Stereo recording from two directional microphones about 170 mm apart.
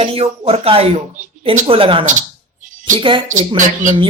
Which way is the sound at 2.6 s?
50° right (ahead or behind).